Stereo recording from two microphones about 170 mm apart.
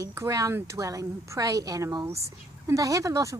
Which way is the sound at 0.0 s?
15° right (ahead or behind).